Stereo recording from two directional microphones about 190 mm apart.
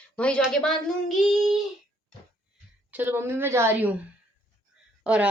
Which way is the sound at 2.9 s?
10° right (ahead or behind).